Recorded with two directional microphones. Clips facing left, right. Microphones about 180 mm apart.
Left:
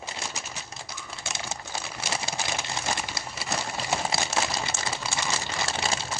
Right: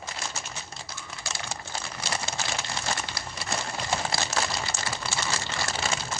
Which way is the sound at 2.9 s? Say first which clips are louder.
Left 1 dB; 15° left (ahead or behind).